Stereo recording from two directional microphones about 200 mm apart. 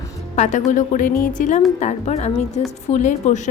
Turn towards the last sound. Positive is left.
turn(degrees=40)  # may be behind; listen again after turning